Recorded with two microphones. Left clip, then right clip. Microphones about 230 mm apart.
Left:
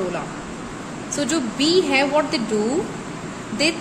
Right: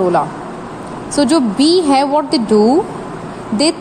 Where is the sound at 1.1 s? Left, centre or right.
Right.